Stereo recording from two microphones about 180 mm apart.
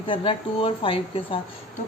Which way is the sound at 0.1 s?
30° left (ahead or behind).